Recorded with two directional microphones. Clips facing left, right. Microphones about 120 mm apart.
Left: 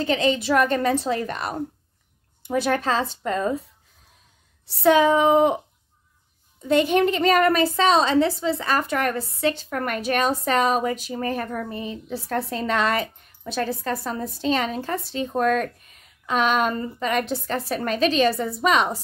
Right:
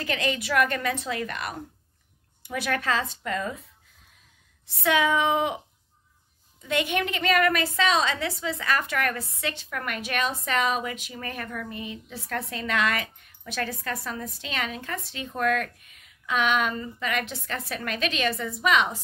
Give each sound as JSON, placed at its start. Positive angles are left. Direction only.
{"t": 0.0, "sound": "a woman's voice", "side_deg": 30}
{"t": 4.6, "sound": "a woman's voice", "side_deg": 35}
{"t": 6.6, "sound": "a woman's voice", "side_deg": 35}